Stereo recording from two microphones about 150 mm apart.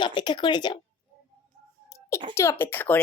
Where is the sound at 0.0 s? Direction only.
30° left (ahead or behind).